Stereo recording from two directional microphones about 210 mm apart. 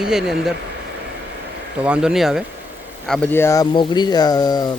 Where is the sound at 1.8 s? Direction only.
5° right (ahead or behind); by 4.7 s 20° left (ahead or behind).